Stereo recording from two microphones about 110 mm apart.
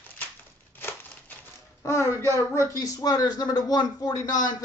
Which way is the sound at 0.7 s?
20° left (ahead or behind).